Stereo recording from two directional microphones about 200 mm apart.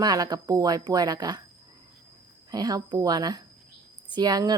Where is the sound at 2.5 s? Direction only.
20° right (ahead or behind).